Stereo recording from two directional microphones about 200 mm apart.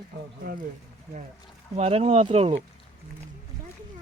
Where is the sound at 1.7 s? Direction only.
30° right (ahead or behind).